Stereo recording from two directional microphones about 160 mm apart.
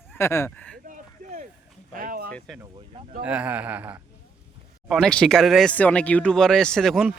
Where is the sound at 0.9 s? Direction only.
55° right (ahead or behind).